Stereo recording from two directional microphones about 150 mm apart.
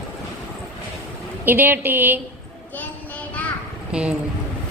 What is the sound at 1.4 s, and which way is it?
Speech, 15° right (ahead or behind).